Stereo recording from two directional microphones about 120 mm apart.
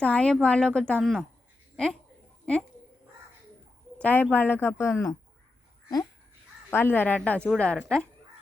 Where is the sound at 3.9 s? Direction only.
15° left (ahead or behind).